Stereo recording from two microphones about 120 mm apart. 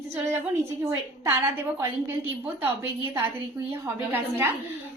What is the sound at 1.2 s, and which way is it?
A woman's voice, 20° right (ahead or behind).